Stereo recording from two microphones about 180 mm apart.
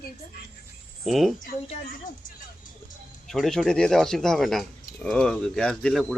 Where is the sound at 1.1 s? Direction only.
Centre (ahead or behind).